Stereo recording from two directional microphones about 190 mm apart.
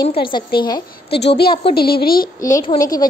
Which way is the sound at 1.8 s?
55° left (ahead or behind).